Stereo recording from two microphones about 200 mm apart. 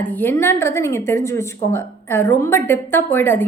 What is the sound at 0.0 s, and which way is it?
A woman's voice, 10° left (ahead or behind).